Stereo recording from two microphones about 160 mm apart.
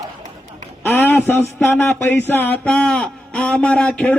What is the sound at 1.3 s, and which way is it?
Speech, 15° left (ahead or behind).